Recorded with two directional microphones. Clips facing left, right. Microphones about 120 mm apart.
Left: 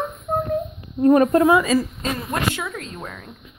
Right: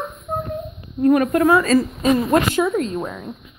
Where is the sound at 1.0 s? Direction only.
30° left (ahead or behind).